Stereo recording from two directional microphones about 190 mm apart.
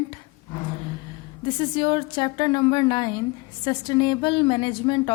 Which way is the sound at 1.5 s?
25° left (ahead or behind).